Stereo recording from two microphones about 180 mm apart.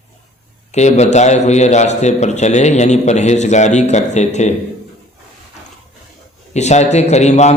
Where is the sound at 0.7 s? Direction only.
40° left (ahead or behind).